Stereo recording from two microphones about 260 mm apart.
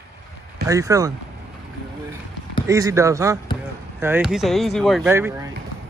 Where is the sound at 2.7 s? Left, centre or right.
Centre.